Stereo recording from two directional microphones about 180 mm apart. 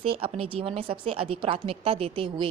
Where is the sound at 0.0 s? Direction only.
30° right (ahead or behind).